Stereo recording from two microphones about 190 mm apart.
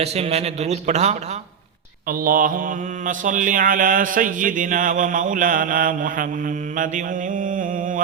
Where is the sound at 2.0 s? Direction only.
50° right (ahead or behind).